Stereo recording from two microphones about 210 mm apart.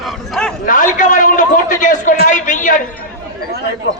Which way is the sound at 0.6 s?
40° left (ahead or behind).